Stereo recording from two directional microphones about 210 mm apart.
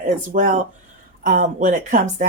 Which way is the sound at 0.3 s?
40° right (ahead or behind).